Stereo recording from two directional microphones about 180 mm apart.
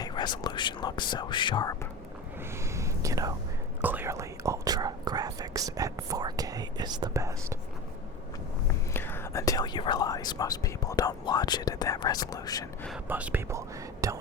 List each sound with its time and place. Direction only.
0.0 s speech: 25° left (ahead or behind)
2.7 s whispering: 15° right (ahead or behind)
3.8 s speech: 10° right (ahead or behind)
8.9 s speech: 10° left (ahead or behind)
13.1 s speech: 10° right (ahead or behind)